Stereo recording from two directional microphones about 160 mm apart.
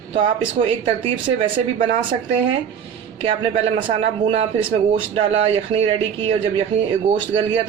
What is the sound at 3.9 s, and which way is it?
Speech, 40° right (ahead or behind).